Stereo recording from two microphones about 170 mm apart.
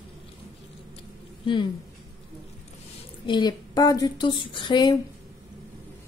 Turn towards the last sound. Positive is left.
turn(degrees=25)  # may be behind; listen again after turning